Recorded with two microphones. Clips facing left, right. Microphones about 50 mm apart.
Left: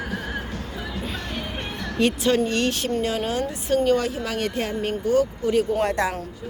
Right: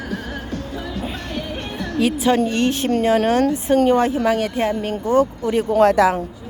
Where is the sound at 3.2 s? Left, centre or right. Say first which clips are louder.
Right 8 dB; right.